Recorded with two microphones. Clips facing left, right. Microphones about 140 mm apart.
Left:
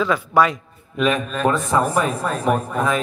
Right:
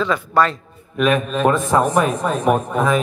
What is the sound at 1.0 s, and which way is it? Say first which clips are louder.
A man's voice: right 3 dB; 15° right (ahead or behind).